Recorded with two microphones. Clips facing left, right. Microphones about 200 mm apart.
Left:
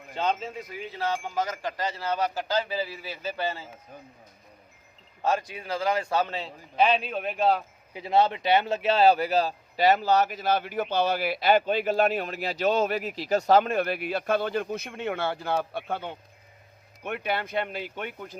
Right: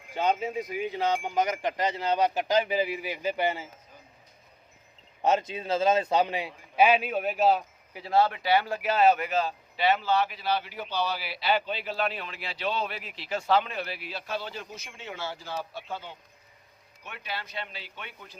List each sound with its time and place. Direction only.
0.1 s speech: 10° right (ahead or behind)
5.2 s speech: 20° right (ahead or behind); by 7.6 s 5° right (ahead or behind)
7.9 s speech: 20° left (ahead or behind); by 18.3 s 50° left (ahead or behind)